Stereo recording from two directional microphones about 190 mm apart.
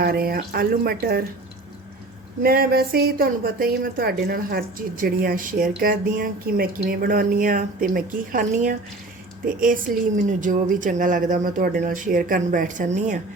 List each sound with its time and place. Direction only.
0.0 s a woman's voice: 55° right (ahead or behind)
2.4 s a woman's voice: 50° right (ahead or behind)
9.9 s a woman's voice: 45° right (ahead or behind)